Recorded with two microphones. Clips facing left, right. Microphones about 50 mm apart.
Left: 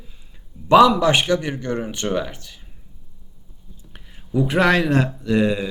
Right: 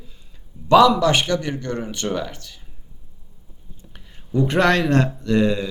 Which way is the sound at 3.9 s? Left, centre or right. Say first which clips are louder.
Even; centre.